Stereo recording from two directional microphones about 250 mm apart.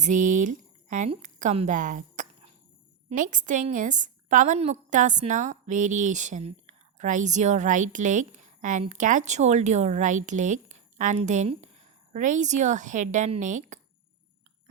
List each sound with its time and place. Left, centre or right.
0.0 s a woman's voice: right